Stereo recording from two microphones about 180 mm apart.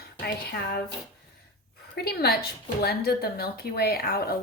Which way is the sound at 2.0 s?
60° left (ahead or behind).